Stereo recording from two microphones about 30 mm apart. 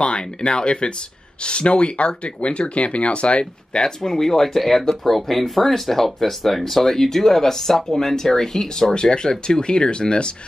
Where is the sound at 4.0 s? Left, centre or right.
Centre.